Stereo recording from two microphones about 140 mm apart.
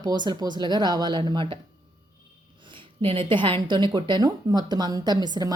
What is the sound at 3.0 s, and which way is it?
A woman's voice, 40° right (ahead or behind).